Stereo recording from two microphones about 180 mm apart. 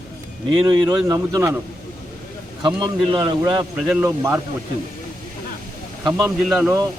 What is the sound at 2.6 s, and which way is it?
A man's voice, 25° right (ahead or behind).